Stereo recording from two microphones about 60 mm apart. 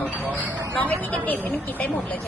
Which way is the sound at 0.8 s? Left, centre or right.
Left.